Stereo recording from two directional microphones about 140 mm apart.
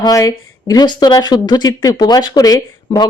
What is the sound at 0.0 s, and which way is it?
Speech, 25° left (ahead or behind).